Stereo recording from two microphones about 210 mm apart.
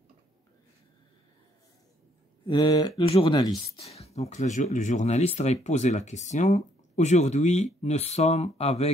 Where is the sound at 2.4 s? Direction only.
20° left (ahead or behind).